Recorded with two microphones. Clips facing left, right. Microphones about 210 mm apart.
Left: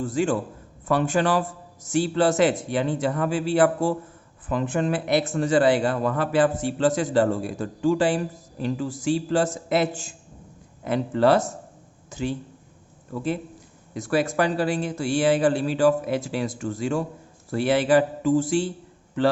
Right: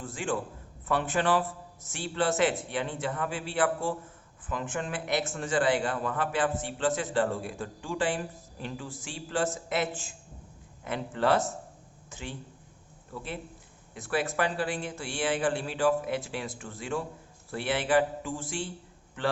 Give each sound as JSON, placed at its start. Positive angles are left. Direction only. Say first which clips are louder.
{"t": 0.0, "sound": "speech", "louder": "left 9 dB", "side_deg": 40}
{"t": 13.9, "sound": "speech", "louder": "left 7 dB", "side_deg": 40}